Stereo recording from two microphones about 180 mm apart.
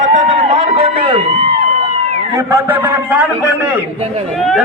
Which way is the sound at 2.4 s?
15° right (ahead or behind).